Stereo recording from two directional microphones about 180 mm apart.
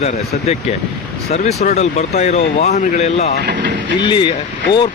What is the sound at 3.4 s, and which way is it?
Speech, 65° right (ahead or behind).